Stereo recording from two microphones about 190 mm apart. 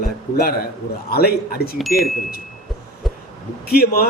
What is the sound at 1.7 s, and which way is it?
Speech, centre (ahead or behind).